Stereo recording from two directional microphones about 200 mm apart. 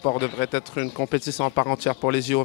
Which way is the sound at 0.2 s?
10° left (ahead or behind).